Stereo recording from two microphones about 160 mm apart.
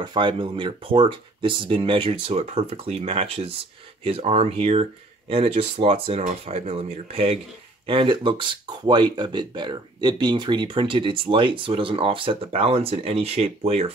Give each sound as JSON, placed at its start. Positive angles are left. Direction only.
{"t": 0.0, "sound": "speech", "side_deg": -30}